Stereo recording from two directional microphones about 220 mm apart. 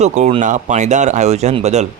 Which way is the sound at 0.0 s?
30° right (ahead or behind).